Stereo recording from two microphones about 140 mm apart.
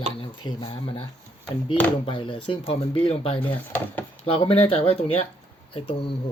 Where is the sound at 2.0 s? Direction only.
40° left (ahead or behind).